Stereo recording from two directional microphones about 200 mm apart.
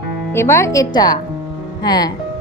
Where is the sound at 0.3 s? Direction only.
15° left (ahead or behind).